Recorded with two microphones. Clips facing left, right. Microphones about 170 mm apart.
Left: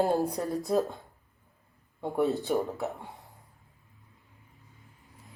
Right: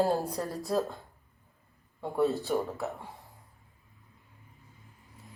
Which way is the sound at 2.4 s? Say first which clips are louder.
Left 2 dB; 20° left (ahead or behind).